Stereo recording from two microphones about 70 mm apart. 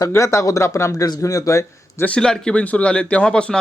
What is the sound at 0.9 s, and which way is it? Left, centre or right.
A man's voice, left.